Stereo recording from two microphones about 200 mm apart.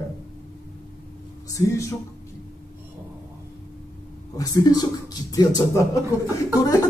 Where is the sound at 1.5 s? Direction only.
15° left (ahead or behind).